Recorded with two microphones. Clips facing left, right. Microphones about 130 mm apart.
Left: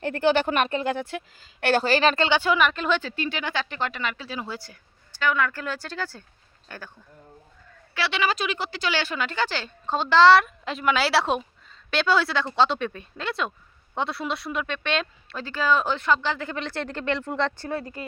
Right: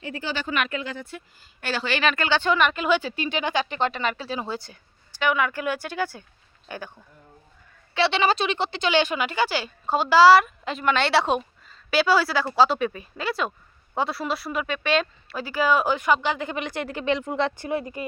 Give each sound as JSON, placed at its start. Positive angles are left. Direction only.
{"t": 0.0, "sound": "speech", "side_deg": 60}
{"t": 0.5, "sound": "a woman's voice", "side_deg": 40}
{"t": 0.9, "sound": "speech", "side_deg": 70}
{"t": 1.7, "sound": "a woman's voice", "side_deg": 40}
{"t": 2.3, "sound": "speech", "side_deg": 5}
{"t": 4.0, "sound": "speech", "side_deg": -35}
{"t": 7.9, "sound": "speech", "side_deg": -25}